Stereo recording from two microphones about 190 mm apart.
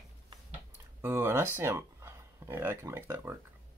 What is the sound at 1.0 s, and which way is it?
Speech, 10° right (ahead or behind).